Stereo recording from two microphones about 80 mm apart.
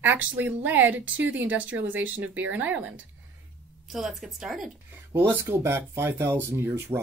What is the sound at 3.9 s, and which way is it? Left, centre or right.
Speech, centre.